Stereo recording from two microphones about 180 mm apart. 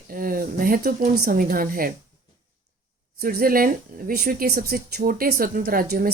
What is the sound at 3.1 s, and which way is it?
Speech, 55° right (ahead or behind).